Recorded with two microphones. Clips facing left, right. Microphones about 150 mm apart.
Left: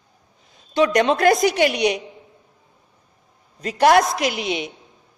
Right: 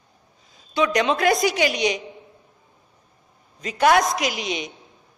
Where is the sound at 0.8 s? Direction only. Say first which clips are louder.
Left 3 dB; 50° left (ahead or behind).